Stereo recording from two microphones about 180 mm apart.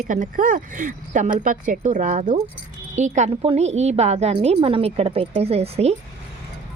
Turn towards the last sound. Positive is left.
turn(degrees=-35)  # may be behind; listen again after turning